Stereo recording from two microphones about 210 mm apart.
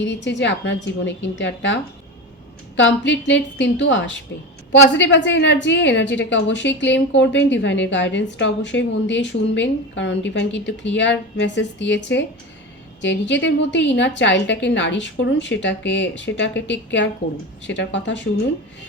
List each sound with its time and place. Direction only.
0.0 s a woman's voice: 60° left (ahead or behind)